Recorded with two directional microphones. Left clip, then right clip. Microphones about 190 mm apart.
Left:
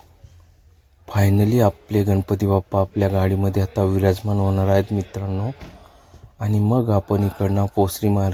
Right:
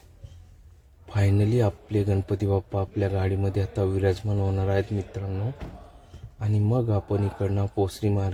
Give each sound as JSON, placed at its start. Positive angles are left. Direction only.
{"t": 1.0, "sound": "speech", "side_deg": 30}
{"t": 6.4, "sound": "speech", "side_deg": 30}